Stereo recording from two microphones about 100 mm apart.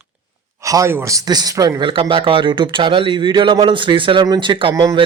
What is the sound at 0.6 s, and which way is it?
Speech, 35° right (ahead or behind).